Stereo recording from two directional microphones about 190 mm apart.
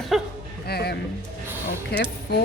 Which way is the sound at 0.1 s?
Centre (ahead or behind).